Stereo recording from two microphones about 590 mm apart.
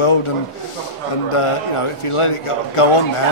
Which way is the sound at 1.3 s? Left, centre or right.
Left.